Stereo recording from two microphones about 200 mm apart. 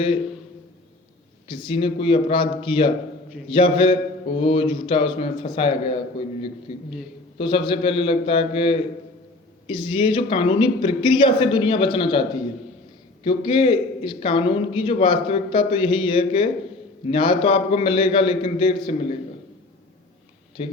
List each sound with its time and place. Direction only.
1.5 s a man's voice: 25° left (ahead or behind)
7.3 s a man's voice: 25° left (ahead or behind)
20.6 s a man's voice: 30° left (ahead or behind)